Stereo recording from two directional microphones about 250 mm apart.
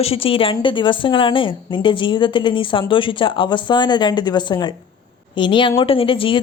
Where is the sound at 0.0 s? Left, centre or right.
Left.